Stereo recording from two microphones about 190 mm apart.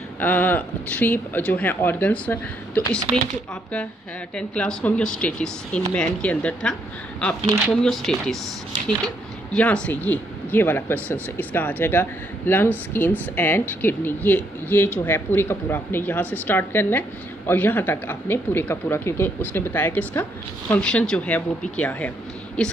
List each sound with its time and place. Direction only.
0.2 s speech: 10° left (ahead or behind)
4.4 s speech: 5° left (ahead or behind)